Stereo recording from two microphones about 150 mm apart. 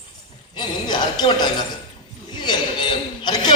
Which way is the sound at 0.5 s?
30° left (ahead or behind).